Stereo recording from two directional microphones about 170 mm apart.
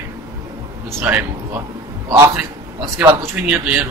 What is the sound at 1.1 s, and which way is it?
Speech, 10° right (ahead or behind).